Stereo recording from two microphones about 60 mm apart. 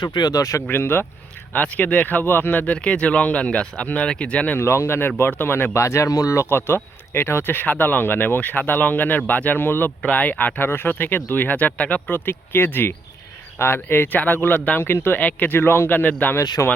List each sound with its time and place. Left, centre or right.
0.3 s speech: left
0.7 s speech: left
1.5 s speech: left
2.2 s speech: left; by 4.5 s centre
4.5 s speech: left
5.7 s speech: left
6.5 s speech: left
12.1 s speech: left
14.8 s speech: left
15.2 s speech: left
15.9 s speech: left
16.6 s speech: left